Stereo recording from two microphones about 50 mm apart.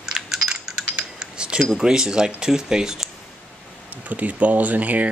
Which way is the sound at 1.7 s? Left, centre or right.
Centre.